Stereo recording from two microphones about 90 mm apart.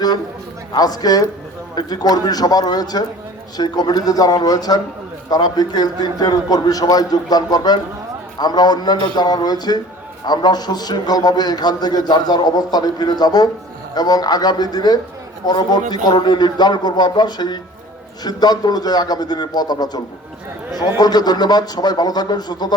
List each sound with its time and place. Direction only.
0.7 s a man's voice: 45° left (ahead or behind)
21.0 s a man's voice: 50° left (ahead or behind)